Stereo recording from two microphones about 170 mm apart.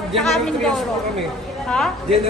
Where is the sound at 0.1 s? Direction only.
Centre (ahead or behind).